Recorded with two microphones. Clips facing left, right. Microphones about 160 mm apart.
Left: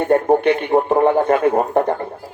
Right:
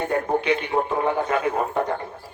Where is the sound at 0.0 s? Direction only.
55° left (ahead or behind).